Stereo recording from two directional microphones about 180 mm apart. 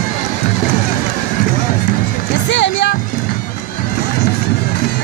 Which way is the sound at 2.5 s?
80° left.